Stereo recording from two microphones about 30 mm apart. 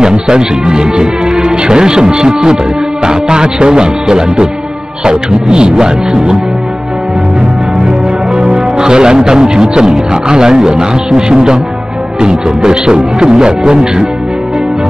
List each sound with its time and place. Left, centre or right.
0.0 s speech: right
8.3 s speech: right